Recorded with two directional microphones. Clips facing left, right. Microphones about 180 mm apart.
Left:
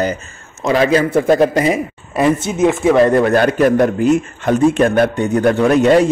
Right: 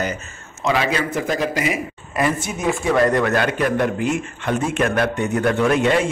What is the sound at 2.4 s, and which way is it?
A man's voice, 20° left (ahead or behind).